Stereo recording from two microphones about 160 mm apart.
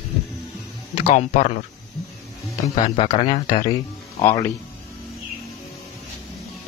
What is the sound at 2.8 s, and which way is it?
Speech, 35° left (ahead or behind).